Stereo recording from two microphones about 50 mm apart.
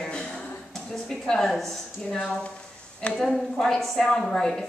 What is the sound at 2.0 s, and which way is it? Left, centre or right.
A woman's voice, centre.